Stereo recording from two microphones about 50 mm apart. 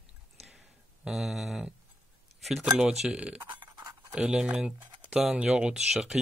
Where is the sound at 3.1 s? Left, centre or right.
Right.